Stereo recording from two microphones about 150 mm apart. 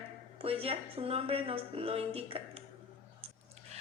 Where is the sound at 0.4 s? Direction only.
40° right (ahead or behind).